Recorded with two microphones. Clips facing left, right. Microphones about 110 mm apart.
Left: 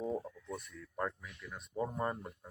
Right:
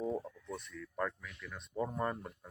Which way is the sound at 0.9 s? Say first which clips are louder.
Right 1 dB; 15° left (ahead or behind).